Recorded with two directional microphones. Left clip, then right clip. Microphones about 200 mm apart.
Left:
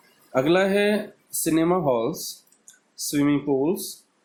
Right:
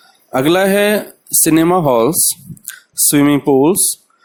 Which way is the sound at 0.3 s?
45° right (ahead or behind).